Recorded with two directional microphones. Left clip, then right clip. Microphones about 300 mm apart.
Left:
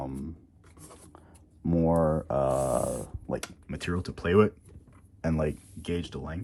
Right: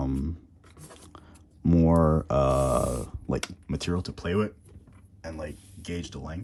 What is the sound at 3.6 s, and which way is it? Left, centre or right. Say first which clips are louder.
Speech: right 2 dB; centre.